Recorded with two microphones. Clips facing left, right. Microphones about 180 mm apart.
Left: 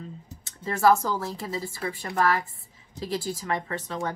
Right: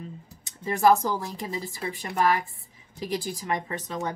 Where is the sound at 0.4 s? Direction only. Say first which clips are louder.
Right 1 dB; 15° right (ahead or behind).